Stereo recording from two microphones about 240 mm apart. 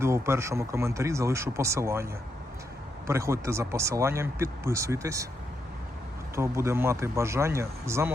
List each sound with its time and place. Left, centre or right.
0.0 s speech: centre
3.1 s speech: centre
6.3 s speech: centre